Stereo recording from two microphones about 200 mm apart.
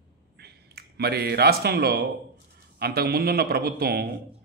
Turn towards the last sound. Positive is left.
turn(degrees=-50)  # may be behind; listen again after turning